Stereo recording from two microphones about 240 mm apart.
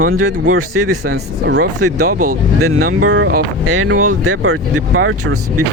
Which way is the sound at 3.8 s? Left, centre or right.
Right.